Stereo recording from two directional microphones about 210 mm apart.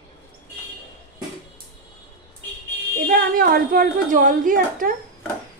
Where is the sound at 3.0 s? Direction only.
45° right (ahead or behind).